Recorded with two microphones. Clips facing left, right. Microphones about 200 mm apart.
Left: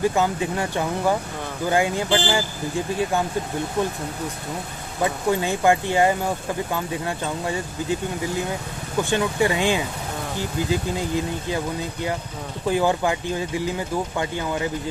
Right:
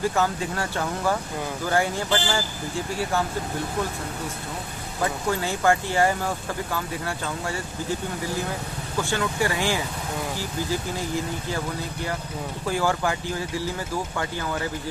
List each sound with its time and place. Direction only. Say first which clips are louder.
0.0 s speech: left 3 dB; 15° left (ahead or behind)
2.0 s speech: left 3 dB; 30° left (ahead or behind)
3.0 s speech: left 2 dB; 15° left (ahead or behind)
5.0 s speech: left 4 dB; 20° left (ahead or behind)
8.9 s speech: left 4 dB; 20° left (ahead or behind)